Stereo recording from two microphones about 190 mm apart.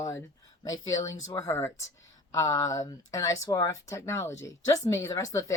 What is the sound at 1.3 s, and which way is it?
A woman's voice, 15° left (ahead or behind).